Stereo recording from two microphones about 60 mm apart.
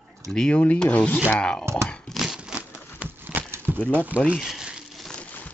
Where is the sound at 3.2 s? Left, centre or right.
Right.